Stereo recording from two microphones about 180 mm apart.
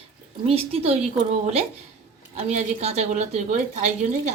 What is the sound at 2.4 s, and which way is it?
A woman's voice, 40° right (ahead or behind).